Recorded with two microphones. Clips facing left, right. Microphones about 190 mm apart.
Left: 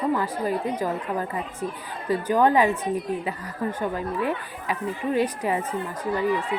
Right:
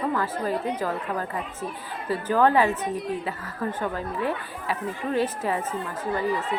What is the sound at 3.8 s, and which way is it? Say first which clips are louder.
A woman's voice: left 2 dB; 15° left (ahead or behind).